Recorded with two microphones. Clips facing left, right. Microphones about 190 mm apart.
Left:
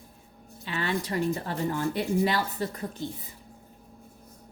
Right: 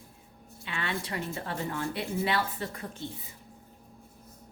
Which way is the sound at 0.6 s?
40° left (ahead or behind).